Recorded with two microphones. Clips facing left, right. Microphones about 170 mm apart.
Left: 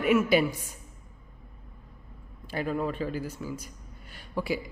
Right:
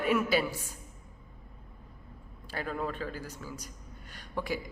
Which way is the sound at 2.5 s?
10° left (ahead or behind).